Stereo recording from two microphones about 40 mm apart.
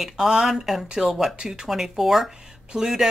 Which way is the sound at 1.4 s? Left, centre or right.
Centre.